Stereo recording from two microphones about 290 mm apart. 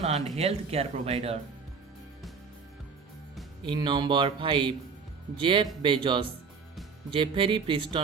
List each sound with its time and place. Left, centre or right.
0.0 s speech: right
3.7 s speech: centre